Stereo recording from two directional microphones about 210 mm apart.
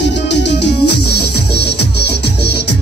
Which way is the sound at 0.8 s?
90° left.